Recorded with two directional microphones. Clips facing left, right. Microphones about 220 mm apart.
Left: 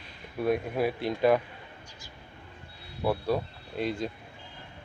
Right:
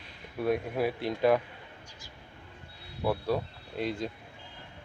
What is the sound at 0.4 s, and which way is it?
Speech, 15° left (ahead or behind).